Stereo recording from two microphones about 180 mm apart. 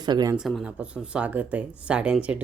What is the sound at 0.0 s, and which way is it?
Speech, 25° right (ahead or behind).